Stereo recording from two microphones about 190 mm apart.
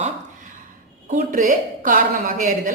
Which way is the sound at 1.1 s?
45° right (ahead or behind).